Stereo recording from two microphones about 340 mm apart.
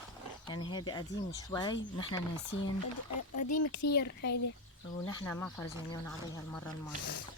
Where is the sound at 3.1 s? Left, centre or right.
Left.